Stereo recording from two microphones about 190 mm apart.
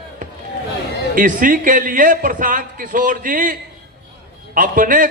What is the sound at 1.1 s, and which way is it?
A man's voice, 45° right (ahead or behind).